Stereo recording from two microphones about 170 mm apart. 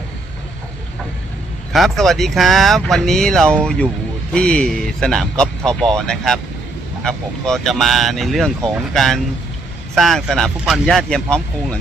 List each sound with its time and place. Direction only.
1.7 s speech: centre (ahead or behind)